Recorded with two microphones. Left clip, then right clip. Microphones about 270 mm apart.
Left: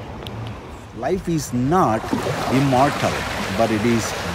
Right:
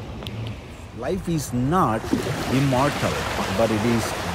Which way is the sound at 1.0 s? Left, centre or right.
Centre.